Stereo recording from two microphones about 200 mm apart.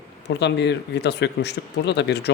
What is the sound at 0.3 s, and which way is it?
Speech, 60° left (ahead or behind).